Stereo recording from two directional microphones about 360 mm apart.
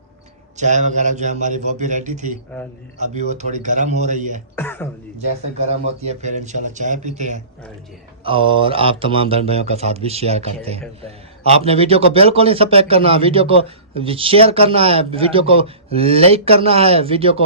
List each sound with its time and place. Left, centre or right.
0.5 s a man's voice: centre
4.5 s throat clearing: centre
6.0 s a man's voice: centre